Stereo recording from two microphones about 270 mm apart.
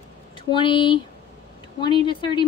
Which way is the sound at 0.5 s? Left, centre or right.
Centre.